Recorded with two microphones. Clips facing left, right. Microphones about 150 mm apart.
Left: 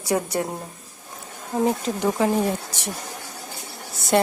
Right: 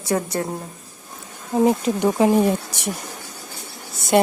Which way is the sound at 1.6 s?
15° right (ahead or behind).